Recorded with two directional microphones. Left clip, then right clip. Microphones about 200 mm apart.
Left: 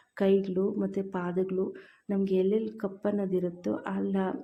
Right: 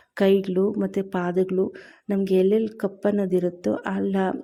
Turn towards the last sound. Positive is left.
turn(degrees=-40)  # may be behind; listen again after turning